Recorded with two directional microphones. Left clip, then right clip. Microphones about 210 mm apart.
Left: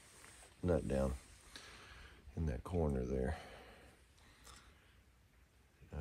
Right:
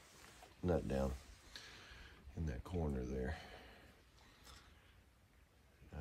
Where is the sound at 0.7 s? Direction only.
10° right (ahead or behind).